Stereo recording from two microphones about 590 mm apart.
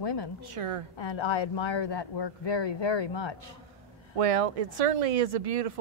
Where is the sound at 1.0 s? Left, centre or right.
Left.